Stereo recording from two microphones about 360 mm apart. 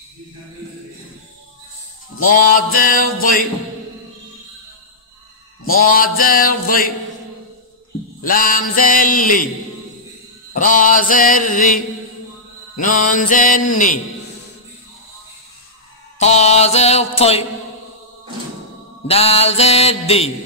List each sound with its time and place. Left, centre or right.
2.1 s music: left
5.9 s music: left
8.2 s music: left
10.5 s music: left
16.2 s mantra: centre
19.0 s mantra: centre